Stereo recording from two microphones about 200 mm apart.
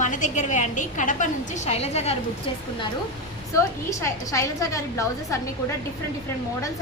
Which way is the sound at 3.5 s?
15° left (ahead or behind).